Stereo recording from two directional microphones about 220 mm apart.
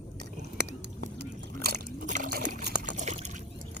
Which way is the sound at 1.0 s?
50° right (ahead or behind).